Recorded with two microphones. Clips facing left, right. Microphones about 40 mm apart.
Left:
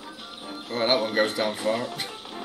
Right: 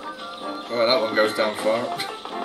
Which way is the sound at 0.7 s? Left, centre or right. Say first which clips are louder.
Right 4 dB; centre.